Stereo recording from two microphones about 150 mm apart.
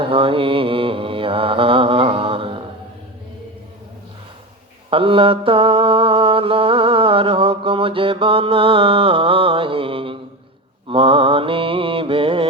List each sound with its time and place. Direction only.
0.0 s mantra: 35° right (ahead or behind)
4.9 s mantra: 35° right (ahead or behind)